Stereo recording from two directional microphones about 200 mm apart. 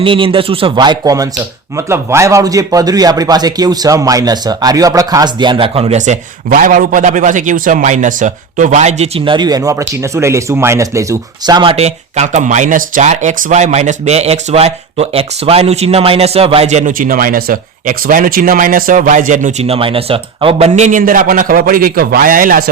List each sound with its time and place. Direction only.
0.0 s a man's voice: 25° right (ahead or behind)
9.0 s speech: 25° right (ahead or behind); by 22.7 s 45° right (ahead or behind)